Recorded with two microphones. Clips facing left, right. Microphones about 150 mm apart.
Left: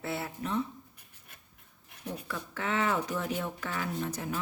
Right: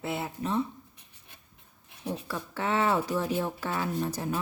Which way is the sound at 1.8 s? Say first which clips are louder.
Right 4 dB; 25° right (ahead or behind).